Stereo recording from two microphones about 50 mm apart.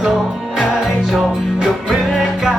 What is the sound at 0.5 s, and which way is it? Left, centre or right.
Music, centre.